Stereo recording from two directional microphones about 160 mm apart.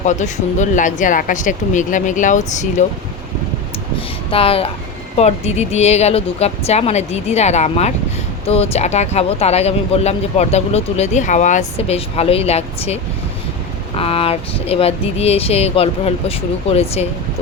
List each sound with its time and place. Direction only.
0.0 s speech: 50° left (ahead or behind)
4.3 s speech: 35° left (ahead or behind)